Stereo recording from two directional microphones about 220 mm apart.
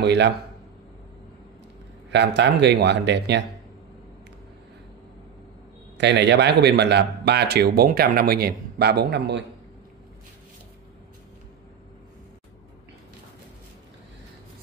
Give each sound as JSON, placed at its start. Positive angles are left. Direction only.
{"t": 0.0, "sound": "a man's voice", "side_deg": -50}
{"t": 2.0, "sound": "a man's voice", "side_deg": -50}
{"t": 5.9, "sound": "a man's voice", "side_deg": -50}